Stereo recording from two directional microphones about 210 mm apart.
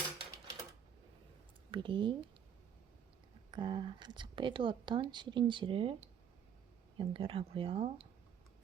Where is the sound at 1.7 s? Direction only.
25° right (ahead or behind).